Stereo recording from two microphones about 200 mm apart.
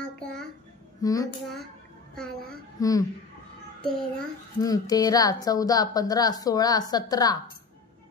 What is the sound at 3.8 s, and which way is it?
Speech, 5° left (ahead or behind).